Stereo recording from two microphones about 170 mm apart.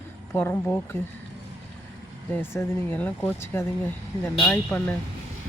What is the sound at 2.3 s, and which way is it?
Speech, 15° left (ahead or behind).